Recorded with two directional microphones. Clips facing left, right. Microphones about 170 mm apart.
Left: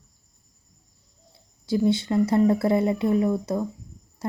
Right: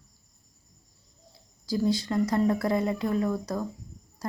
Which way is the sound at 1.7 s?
25° left (ahead or behind).